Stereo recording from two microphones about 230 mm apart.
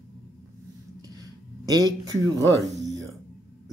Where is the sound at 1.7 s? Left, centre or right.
Centre.